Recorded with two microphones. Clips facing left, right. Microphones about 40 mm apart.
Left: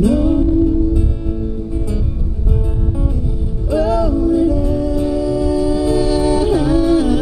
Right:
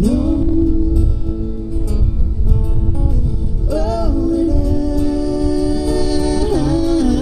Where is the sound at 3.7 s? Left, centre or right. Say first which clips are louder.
Left 3 dB; left.